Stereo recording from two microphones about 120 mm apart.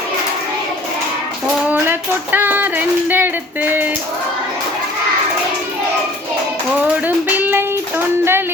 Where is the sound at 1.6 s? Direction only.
15° right (ahead or behind).